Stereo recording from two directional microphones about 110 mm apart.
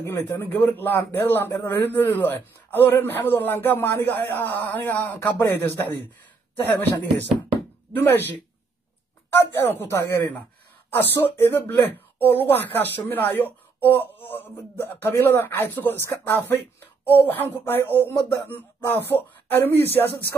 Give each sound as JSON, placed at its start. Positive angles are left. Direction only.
{"t": 0.0, "sound": "a man's voice", "side_deg": 25}
{"t": 6.7, "sound": "a man's voice", "side_deg": 15}
{"t": 9.3, "sound": "a man's voice", "side_deg": 20}